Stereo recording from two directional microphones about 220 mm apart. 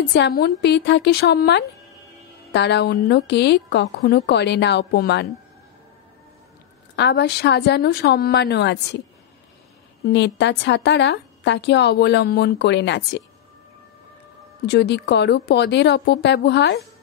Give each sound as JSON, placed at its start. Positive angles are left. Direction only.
{"t": 0.1, "sound": "a woman's voice", "side_deg": 45}
{"t": 7.0, "sound": "a woman's voice", "side_deg": 50}
{"t": 10.0, "sound": "a woman's voice", "side_deg": 50}
{"t": 14.7, "sound": "a woman's voice", "side_deg": 50}